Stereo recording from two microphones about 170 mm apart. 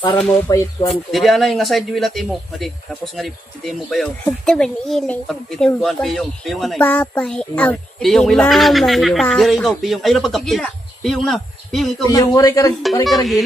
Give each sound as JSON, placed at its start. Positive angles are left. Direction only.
{"t": 0.2, "sound": "speech", "side_deg": 15}
{"t": 0.9, "sound": "child singing", "side_deg": 0}
{"t": 12.0, "sound": "a man's voice", "side_deg": 20}